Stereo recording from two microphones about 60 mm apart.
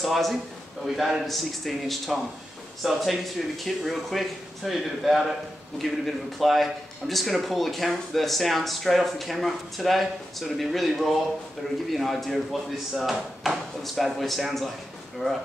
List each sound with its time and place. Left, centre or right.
0.0 s a man's voice: centre